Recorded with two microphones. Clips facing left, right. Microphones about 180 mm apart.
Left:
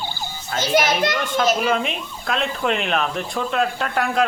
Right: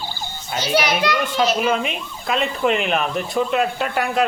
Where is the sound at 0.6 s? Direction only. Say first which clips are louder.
Left 1 dB; 50° left (ahead or behind).